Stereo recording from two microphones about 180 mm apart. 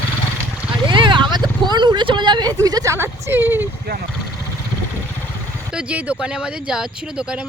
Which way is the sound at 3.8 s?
60° right (ahead or behind).